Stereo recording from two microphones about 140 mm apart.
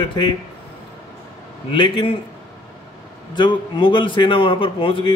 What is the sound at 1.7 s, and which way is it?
Speech, 40° left (ahead or behind).